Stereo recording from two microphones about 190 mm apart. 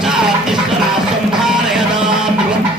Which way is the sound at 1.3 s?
5° right (ahead or behind).